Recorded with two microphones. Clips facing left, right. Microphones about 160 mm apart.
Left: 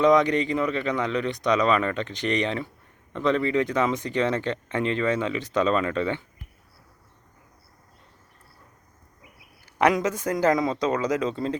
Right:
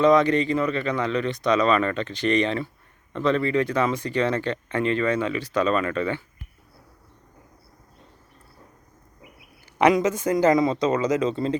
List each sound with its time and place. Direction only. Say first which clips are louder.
0.0 s speech: right 1 dB; 15° left (ahead or behind)
9.7 s a man's voice: right 3 dB; centre (ahead or behind)